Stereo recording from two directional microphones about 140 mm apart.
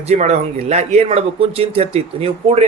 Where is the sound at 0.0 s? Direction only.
55° right (ahead or behind).